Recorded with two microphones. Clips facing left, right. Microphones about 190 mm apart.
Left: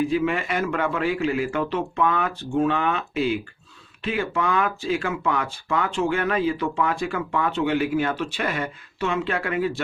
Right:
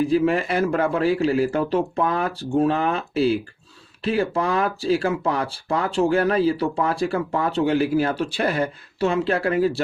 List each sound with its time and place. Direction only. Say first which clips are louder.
0.0 s speech: right 3 dB; 35° right (ahead or behind)